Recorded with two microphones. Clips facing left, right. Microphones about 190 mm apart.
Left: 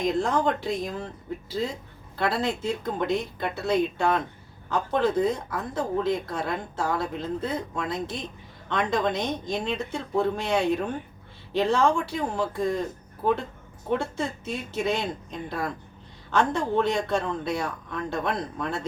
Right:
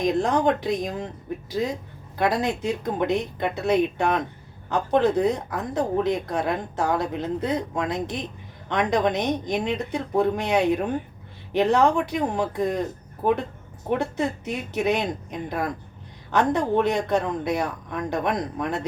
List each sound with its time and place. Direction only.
0.0 s speech: 15° right (ahead or behind)
13.9 s speech: 15° right (ahead or behind)